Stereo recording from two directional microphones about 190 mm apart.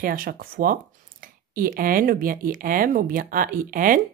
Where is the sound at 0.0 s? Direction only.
50° right (ahead or behind).